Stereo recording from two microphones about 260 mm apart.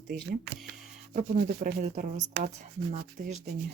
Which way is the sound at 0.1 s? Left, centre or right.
Right.